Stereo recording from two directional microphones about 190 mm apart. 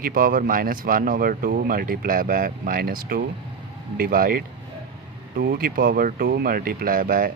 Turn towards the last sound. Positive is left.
turn(degrees=-50)  # may be behind; listen again after turning